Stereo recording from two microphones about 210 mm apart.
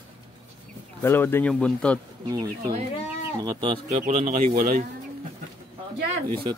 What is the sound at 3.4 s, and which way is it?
Speech, 20° right (ahead or behind).